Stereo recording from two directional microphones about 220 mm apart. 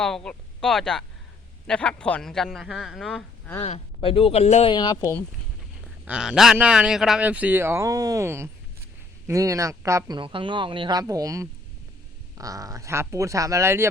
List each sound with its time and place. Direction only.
0.0 s a man's voice: 5° left (ahead or behind)
3.6 s speech: 25° left (ahead or behind)
6.1 s speech: 5° right (ahead or behind)